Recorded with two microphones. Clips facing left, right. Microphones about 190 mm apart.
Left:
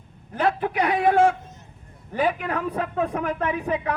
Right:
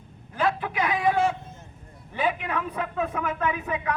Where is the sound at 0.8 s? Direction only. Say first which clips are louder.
Left 5 dB; 60° left (ahead or behind).